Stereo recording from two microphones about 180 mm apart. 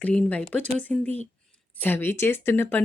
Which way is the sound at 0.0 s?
5° left (ahead or behind).